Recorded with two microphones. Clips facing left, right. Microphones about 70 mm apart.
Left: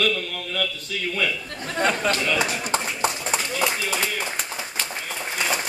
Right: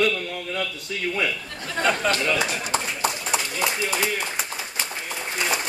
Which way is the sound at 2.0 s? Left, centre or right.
Centre.